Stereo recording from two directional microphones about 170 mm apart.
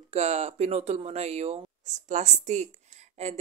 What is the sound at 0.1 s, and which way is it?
Speech, 40° right (ahead or behind).